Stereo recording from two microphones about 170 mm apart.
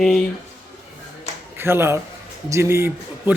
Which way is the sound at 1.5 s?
15° right (ahead or behind).